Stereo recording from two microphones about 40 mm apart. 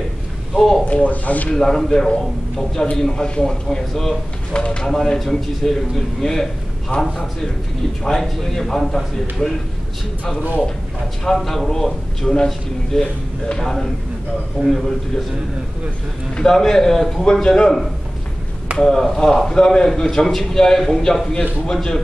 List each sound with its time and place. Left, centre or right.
0.6 s a man's voice: centre
1.0 s speech: left
1.5 s a man's voice: centre
4.6 s speech: left
4.8 s a man's voice: centre
6.9 s speech: left
8.0 s a man's voice: centre
11.3 s a man's voice: centre
16.4 s a man's voice: centre
18.8 s a man's voice: centre